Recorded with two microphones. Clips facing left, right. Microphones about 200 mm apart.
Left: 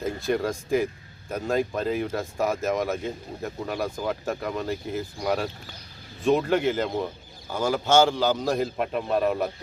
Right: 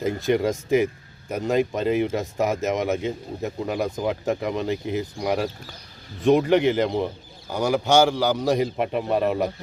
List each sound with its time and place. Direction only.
0.0 s speech: 20° right (ahead or behind)